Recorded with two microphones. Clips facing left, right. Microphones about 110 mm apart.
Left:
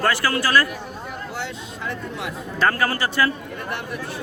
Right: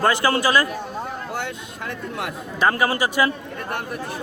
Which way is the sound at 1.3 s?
55° right (ahead or behind).